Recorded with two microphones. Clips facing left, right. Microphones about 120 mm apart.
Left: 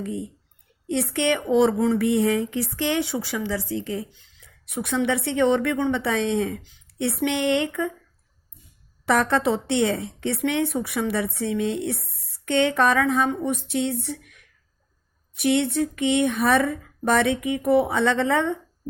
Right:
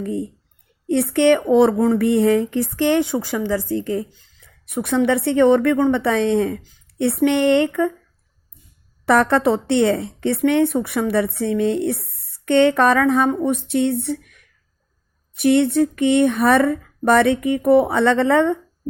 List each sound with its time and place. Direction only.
0.0 s a woman's voice: 60° right (ahead or behind)
9.0 s a woman's voice: 60° right (ahead or behind)
15.4 s a woman's voice: 55° right (ahead or behind)